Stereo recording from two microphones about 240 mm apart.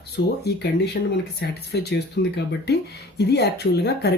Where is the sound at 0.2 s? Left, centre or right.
Left.